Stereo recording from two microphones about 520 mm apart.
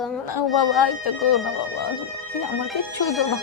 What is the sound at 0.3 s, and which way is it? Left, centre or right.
Speech, left.